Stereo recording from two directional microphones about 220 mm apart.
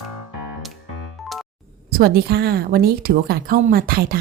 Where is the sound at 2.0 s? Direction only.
45° right (ahead or behind).